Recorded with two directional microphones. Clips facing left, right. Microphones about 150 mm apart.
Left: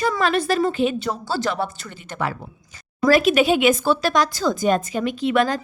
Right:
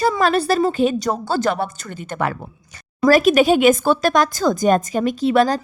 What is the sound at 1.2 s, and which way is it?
Speech, 50° right (ahead or behind).